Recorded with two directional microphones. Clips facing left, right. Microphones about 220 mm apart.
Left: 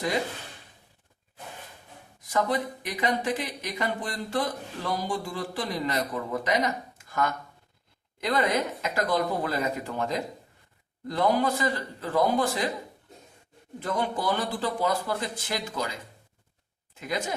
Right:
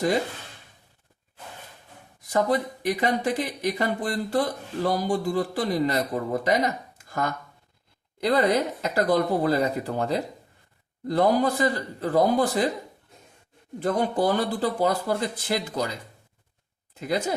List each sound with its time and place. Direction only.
2.3 s speech: 35° right (ahead or behind)
13.8 s speech: 40° right (ahead or behind)
17.0 s speech: 35° right (ahead or behind)